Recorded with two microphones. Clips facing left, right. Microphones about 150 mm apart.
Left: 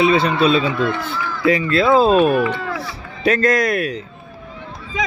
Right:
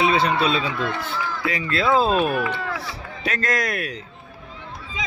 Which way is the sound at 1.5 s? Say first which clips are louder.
Left 8 dB; 55° left (ahead or behind).